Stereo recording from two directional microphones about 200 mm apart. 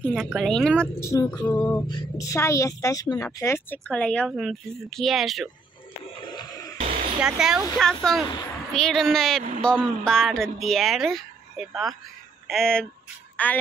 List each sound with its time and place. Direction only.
0.0 s a woman's voice: centre (ahead or behind)
6.0 s a sound: 25° left (ahead or behind)
7.2 s a woman's voice: 5° right (ahead or behind)